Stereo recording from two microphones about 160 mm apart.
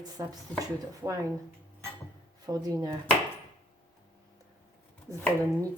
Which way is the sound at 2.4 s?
25° right (ahead or behind).